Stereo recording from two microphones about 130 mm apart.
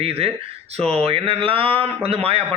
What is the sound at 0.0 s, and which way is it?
A man's voice, 50° right (ahead or behind).